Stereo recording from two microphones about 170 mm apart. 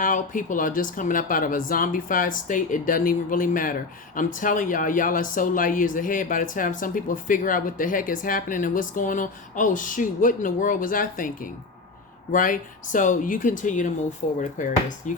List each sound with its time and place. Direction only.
0.0 s speech: 50° left (ahead or behind)